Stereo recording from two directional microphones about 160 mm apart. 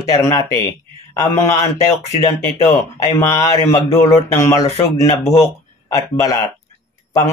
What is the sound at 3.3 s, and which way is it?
Speech, 20° left (ahead or behind).